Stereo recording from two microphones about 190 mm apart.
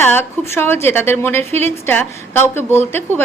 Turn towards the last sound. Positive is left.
turn(degrees=10)  # may be behind; listen again after turning